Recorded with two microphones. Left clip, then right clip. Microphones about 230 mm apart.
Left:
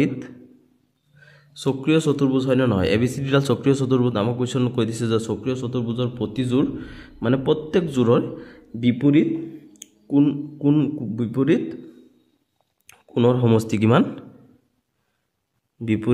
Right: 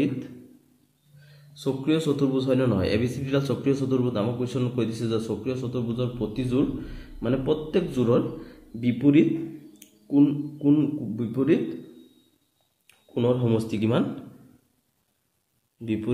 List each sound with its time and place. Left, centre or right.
1.2 s a man's voice: left
12.8 s speech: left
15.8 s a man's voice: left